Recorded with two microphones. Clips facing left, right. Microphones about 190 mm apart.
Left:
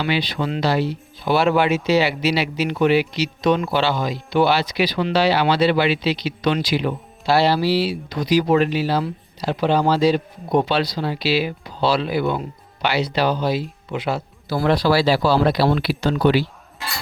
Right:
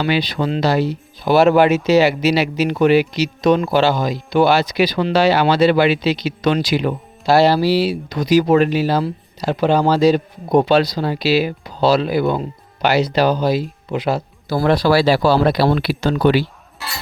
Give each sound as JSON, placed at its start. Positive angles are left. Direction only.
{"t": 0.0, "sound": "speech", "side_deg": -40}